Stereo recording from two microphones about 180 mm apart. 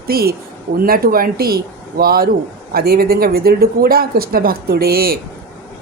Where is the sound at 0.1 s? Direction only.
60° right (ahead or behind).